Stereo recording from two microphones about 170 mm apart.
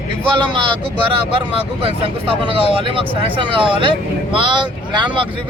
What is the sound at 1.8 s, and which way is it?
Speech, 35° right (ahead or behind).